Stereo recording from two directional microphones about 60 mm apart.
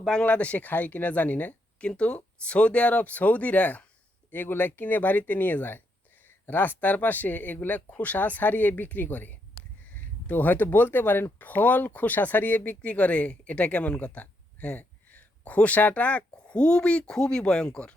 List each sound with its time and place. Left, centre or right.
0.0 s speech: centre
0.3 s speech: left